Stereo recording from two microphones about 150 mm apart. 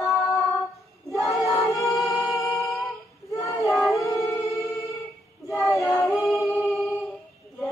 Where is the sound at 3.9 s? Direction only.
20° left (ahead or behind).